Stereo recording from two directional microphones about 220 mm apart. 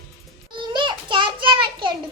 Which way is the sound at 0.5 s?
20° right (ahead or behind).